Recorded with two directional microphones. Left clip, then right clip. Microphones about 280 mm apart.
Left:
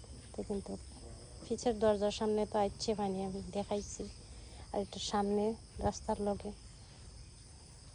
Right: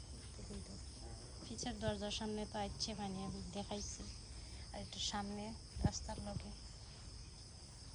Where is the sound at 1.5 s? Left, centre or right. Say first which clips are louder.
Left 13 dB; centre.